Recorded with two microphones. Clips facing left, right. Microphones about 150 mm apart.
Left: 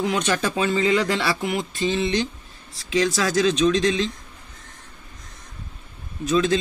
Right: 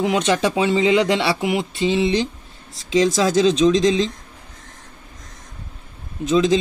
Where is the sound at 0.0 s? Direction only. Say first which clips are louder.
Right 4 dB; 20° right (ahead or behind).